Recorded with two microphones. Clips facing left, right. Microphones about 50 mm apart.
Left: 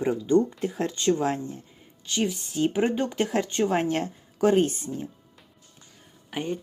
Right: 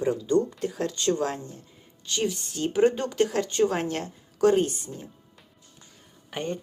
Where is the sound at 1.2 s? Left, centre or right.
Left.